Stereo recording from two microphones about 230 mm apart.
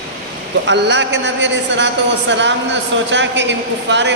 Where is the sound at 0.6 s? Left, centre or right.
Right.